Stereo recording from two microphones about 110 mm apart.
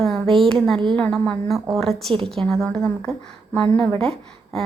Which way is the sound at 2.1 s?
55° right (ahead or behind).